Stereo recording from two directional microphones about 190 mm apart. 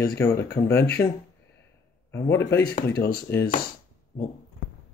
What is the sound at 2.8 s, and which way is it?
Speech, 55° left (ahead or behind).